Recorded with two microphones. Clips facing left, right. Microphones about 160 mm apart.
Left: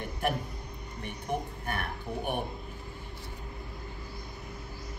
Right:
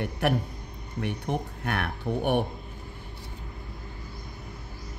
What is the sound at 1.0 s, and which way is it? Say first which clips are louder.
Speech: right 4 dB; 75° right (ahead or behind).